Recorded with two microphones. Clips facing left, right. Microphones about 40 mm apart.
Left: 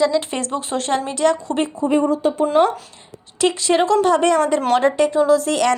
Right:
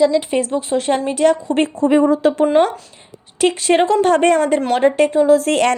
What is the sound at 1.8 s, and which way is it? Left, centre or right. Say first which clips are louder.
Speech: right 4 dB; right.